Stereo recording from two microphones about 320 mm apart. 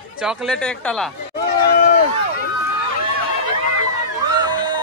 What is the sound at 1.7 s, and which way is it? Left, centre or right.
Run, left.